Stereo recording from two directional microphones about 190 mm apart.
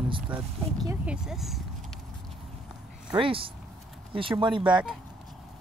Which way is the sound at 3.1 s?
30° right (ahead or behind).